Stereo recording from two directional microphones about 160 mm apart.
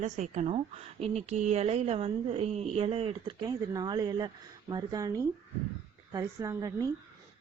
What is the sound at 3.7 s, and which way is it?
A woman's voice, 25° right (ahead or behind).